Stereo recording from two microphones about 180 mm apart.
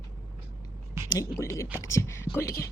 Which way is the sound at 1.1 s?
15° left (ahead or behind).